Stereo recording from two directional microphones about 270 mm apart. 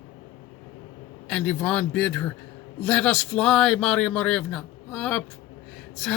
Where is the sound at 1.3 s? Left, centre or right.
Centre.